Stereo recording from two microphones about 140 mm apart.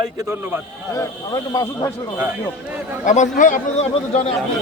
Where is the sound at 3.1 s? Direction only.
65° left (ahead or behind).